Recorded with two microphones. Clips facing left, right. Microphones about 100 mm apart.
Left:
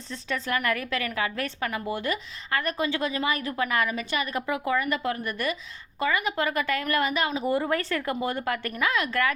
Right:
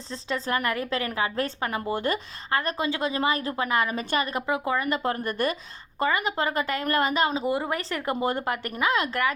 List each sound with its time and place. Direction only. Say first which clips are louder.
0.1 s a woman's voice: right 1 dB; 30° right (ahead or behind)
7.4 s speech: left 1 dB; 20° right (ahead or behind)